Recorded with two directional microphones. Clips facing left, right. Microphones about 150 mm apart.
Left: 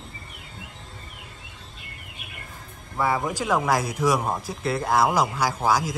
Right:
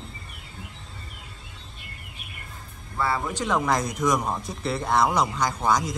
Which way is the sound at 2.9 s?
15° left (ahead or behind).